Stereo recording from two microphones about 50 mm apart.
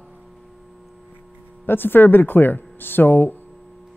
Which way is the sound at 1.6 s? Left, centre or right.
Left.